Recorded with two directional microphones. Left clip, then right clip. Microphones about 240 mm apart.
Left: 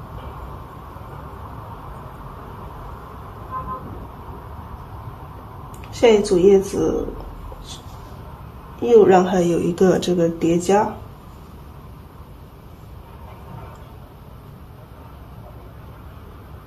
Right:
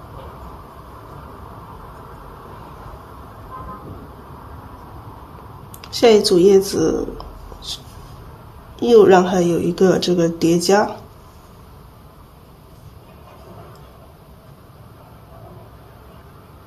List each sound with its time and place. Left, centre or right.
5.8 s speech: right
8.8 s speech: right